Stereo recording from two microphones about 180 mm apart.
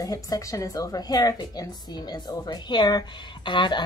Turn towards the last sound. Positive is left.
turn(degrees=25)  # may be behind; listen again after turning